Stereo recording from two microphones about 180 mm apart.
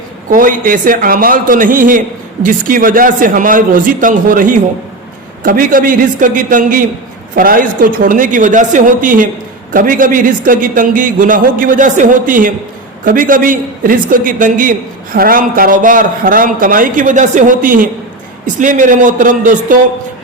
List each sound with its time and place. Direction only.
0.3 s a man's voice: 50° right (ahead or behind)